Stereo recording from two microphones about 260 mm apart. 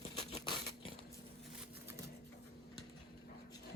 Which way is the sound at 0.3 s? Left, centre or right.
Centre.